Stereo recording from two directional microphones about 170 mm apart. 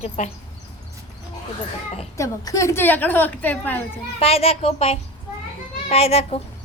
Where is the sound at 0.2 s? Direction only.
45° left (ahead or behind).